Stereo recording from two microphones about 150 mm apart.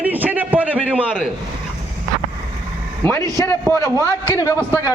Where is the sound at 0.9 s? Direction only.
10° right (ahead or behind).